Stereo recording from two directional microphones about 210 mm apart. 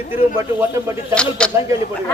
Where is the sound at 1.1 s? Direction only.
5° left (ahead or behind).